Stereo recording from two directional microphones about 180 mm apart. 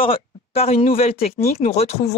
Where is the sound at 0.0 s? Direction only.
30° left (ahead or behind).